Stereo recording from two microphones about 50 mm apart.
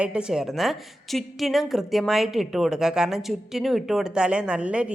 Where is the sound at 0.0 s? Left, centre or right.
Right.